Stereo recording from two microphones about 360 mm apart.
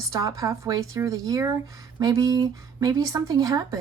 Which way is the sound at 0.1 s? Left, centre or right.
Centre.